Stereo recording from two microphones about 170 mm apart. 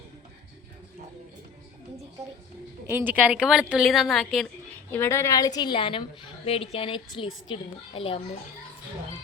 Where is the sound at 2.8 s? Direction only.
10° right (ahead or behind).